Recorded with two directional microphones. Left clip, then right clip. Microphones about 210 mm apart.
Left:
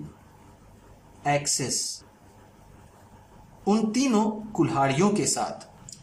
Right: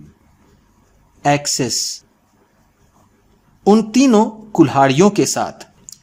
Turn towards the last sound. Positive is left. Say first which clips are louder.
# right 6 dB
turn(degrees=-40)  # may be behind; listen again after turning